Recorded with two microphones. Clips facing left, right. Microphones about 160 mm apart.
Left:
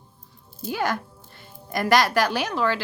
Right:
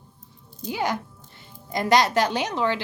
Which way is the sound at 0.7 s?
20° right (ahead or behind).